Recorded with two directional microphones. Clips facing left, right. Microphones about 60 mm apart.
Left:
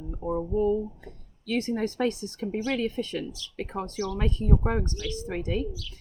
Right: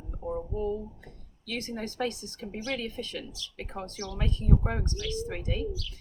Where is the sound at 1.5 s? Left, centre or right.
Left.